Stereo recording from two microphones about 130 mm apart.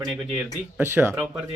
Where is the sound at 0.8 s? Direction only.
15° right (ahead or behind).